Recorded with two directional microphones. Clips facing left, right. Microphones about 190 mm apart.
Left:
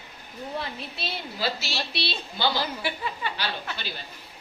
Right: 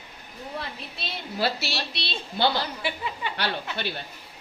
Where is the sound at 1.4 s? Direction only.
60° right (ahead or behind).